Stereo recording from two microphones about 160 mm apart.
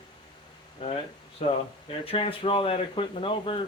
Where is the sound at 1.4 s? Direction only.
45° left (ahead or behind).